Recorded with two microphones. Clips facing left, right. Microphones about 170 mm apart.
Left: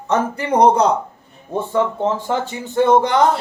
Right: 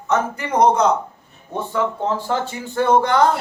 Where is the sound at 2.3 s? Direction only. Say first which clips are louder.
Left 1 dB; 20° left (ahead or behind).